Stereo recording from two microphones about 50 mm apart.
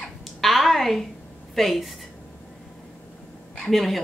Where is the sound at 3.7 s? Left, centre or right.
Centre.